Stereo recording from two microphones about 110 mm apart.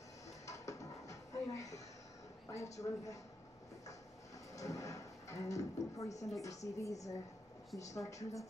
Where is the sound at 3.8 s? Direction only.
30° left (ahead or behind).